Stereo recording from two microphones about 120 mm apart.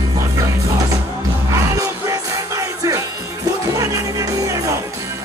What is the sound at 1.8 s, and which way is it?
Music, 25° right (ahead or behind).